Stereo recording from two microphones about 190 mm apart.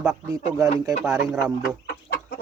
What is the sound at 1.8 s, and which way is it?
Chicken, 50° left (ahead or behind).